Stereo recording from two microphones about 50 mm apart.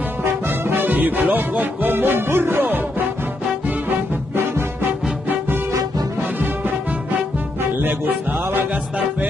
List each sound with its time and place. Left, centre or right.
0.5 s music: right
7.8 s music: right